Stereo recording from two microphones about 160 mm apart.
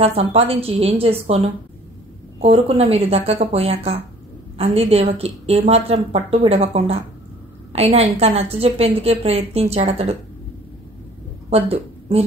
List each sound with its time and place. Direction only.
0.0 s a woman's voice: 40° right (ahead or behind)
2.4 s a woman's voice: 40° right (ahead or behind)
11.5 s speech: 40° right (ahead or behind)